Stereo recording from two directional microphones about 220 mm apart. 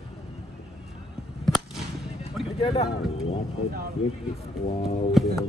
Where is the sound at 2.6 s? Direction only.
25° left (ahead or behind).